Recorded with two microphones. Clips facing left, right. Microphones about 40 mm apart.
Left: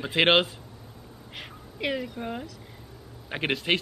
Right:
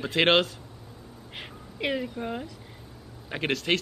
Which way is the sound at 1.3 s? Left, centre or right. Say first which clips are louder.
Even; centre.